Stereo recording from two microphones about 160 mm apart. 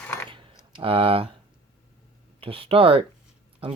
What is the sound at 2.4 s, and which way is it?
Speech, 35° right (ahead or behind).